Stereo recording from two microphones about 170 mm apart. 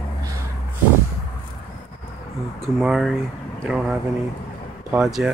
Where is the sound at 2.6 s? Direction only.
Centre (ahead or behind).